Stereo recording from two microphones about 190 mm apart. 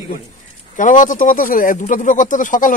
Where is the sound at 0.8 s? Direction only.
45° left (ahead or behind).